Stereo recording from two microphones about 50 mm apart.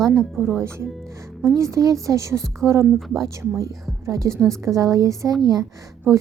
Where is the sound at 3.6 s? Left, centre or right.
Right.